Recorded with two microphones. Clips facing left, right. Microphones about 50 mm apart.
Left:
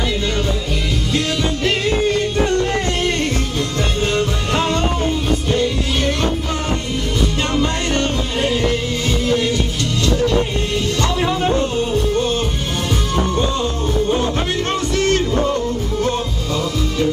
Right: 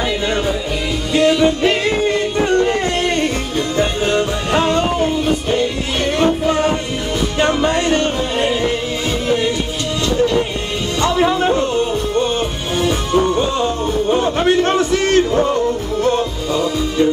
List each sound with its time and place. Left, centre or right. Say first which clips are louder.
1.1 s music: right 9 dB; centre
11.0 s music: right 7 dB; centre